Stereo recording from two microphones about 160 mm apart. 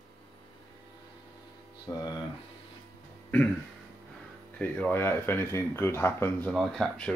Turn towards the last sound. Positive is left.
turn(degrees=5)  # may be behind; listen again after turning